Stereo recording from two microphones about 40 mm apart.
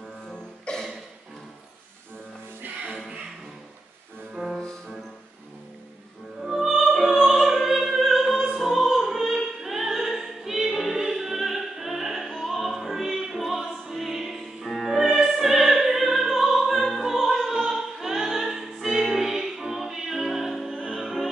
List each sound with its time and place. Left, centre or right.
0.3 s music: centre
6.5 s opera: centre
21.0 s music: centre